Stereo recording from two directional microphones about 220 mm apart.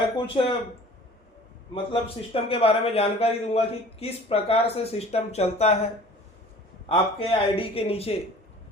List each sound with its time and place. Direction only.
0.4 s a man's voice: 30° left (ahead or behind)
1.7 s a man's voice: 25° left (ahead or behind)